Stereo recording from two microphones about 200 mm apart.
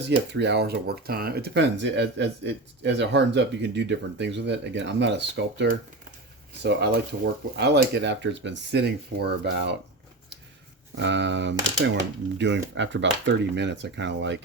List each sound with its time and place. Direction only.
0.3 s speech: 60° right (ahead or behind)
10.9 s speech: 60° right (ahead or behind)